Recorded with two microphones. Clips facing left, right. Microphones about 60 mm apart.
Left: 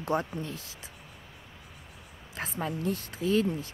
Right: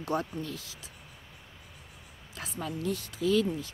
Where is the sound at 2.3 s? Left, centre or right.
Left.